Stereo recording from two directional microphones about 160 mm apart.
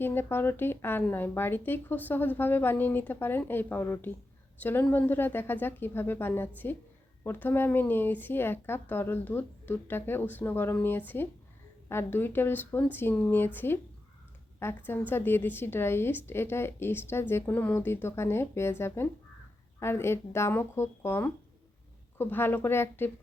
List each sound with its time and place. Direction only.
0.0 s a woman's voice: 15° left (ahead or behind)